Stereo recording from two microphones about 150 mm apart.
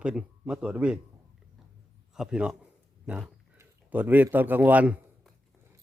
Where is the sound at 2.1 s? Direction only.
5° right (ahead or behind).